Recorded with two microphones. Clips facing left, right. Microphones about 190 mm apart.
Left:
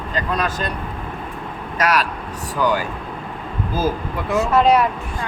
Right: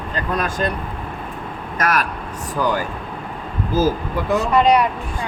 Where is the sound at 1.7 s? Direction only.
50° right (ahead or behind).